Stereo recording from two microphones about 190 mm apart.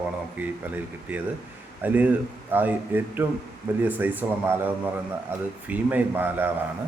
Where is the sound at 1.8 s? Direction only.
10° right (ahead or behind).